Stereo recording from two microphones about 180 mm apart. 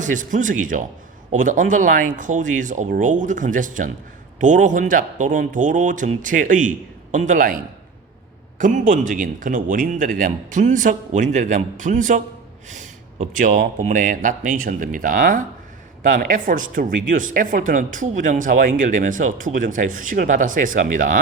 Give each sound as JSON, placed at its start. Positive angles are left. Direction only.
{"t": 0.0, "sound": "speech", "side_deg": -45}